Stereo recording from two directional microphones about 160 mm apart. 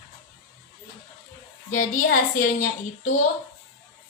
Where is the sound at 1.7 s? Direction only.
55° left (ahead or behind).